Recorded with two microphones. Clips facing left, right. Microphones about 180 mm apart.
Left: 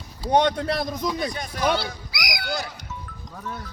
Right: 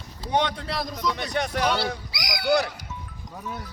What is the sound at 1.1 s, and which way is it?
Speech, 70° right (ahead or behind).